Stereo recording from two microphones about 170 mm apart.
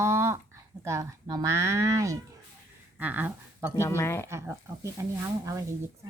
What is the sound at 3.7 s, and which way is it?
Speech, 15° left (ahead or behind).